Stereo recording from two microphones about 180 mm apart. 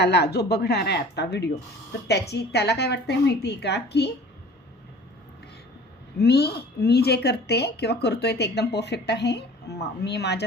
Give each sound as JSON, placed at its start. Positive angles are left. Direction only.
{"t": 0.0, "sound": "a woman's voice", "side_deg": 70}
{"t": 6.1, "sound": "a woman's voice", "side_deg": 65}